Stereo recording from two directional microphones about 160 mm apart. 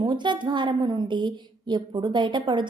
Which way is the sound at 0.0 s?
30° right (ahead or behind).